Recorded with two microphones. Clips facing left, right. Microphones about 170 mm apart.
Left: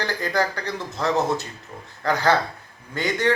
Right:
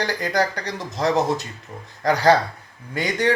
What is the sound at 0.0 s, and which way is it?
Speech, 15° right (ahead or behind).